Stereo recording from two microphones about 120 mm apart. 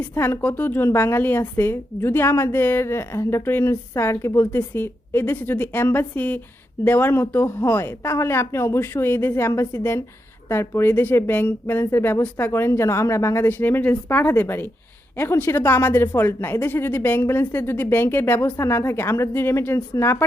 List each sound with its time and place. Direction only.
0.0 s a woman's voice: 20° left (ahead or behind)